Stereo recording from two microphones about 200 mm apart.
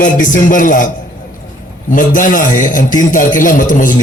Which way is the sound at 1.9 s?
40° left (ahead or behind).